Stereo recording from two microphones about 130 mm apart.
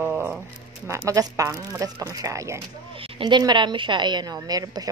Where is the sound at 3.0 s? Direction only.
40° right (ahead or behind).